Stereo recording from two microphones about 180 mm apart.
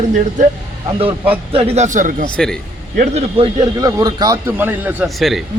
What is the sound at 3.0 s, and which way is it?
Speech, 35° right (ahead or behind).